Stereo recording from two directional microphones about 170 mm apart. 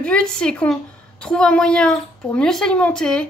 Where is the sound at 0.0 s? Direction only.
5° left (ahead or behind).